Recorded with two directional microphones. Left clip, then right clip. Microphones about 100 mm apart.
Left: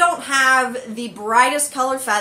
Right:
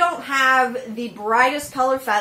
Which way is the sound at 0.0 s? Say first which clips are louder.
Left 2 dB; 20° left (ahead or behind).